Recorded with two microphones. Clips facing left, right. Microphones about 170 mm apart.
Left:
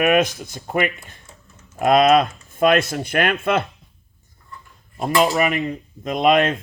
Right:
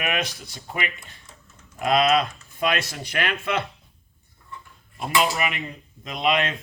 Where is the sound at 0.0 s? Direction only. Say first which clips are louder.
Left 11 dB; 45° left (ahead or behind).